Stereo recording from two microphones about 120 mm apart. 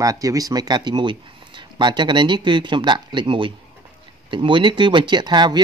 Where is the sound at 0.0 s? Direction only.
30° right (ahead or behind).